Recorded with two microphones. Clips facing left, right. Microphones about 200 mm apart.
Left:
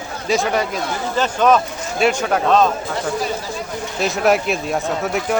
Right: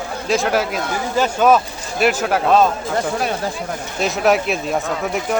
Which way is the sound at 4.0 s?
Centre (ahead or behind).